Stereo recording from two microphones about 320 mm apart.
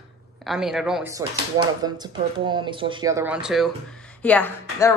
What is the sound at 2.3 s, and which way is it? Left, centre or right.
A woman's voice, centre.